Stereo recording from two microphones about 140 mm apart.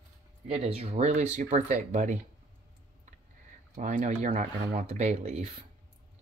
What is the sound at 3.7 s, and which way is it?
Speech, 65° right (ahead or behind).